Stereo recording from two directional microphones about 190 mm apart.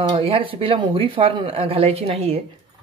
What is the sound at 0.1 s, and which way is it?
Speech, 30° right (ahead or behind).